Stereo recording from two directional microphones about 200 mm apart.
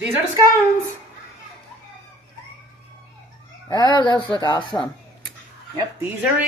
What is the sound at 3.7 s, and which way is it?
Speech, 20° left (ahead or behind).